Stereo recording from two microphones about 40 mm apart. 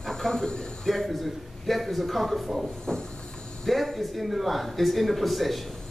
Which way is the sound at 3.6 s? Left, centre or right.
Centre.